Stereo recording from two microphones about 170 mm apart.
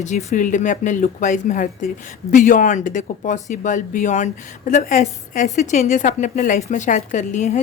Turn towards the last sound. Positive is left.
turn(degrees=45)  # may be behind; listen again after turning